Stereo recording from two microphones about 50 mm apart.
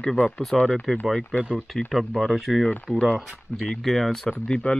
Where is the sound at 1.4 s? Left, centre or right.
Right.